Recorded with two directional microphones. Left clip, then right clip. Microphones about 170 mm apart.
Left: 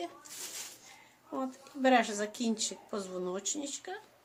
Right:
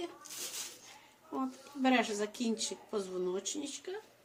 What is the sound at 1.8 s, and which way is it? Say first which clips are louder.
Speech: left 4 dB; 30° left (ahead or behind).